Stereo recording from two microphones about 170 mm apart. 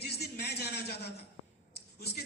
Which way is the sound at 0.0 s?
70° left (ahead or behind).